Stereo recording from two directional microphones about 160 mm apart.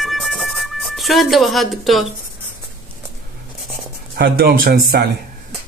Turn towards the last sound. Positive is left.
turn(degrees=-65)  # may be behind; listen again after turning